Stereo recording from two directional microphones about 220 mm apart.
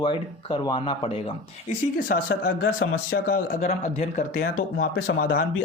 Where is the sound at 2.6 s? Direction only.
60° left (ahead or behind).